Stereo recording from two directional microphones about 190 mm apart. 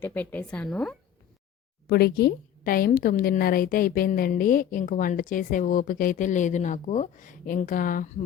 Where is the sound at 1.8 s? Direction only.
60° left (ahead or behind).